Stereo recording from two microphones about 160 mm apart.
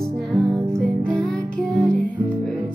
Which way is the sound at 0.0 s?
5° left (ahead or behind).